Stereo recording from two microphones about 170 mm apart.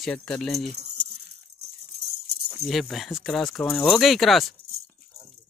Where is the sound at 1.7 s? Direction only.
70° right (ahead or behind).